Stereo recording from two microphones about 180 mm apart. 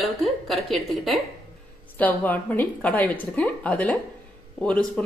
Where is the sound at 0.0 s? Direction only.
Centre (ahead or behind).